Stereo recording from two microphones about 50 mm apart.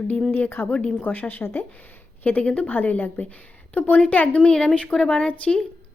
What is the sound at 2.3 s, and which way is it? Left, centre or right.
A woman's voice, left.